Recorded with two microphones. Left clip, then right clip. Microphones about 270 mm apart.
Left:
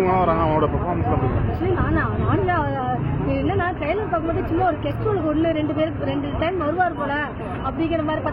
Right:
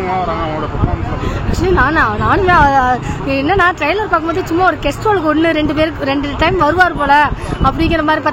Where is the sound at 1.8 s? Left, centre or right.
Right.